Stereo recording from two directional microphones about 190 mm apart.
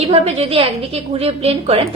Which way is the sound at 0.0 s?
35° right (ahead or behind).